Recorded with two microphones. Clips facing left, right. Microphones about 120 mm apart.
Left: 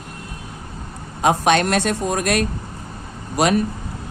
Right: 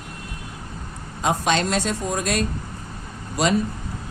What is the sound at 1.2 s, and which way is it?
A man's voice, 60° left (ahead or behind).